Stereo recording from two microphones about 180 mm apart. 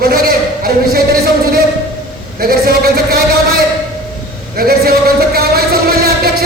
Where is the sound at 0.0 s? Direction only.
55° right (ahead or behind).